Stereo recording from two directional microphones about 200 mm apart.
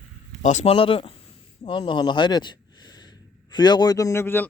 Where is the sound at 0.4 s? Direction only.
30° left (ahead or behind).